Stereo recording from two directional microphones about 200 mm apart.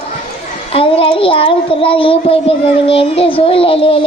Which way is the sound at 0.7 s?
25° left (ahead or behind).